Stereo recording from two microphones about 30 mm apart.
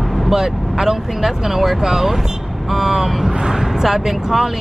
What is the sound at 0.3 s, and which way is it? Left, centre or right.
Speech, centre.